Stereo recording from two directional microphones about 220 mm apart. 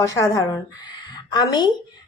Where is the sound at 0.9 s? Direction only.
20° left (ahead or behind).